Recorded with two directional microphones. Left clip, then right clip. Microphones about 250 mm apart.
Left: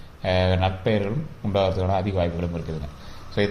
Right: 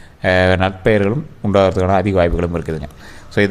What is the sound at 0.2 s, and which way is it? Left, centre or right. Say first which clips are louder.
Speech: right 9 dB; right.